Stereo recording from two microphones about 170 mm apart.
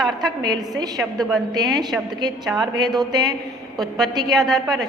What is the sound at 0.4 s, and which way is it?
A woman's voice, 25° right (ahead or behind).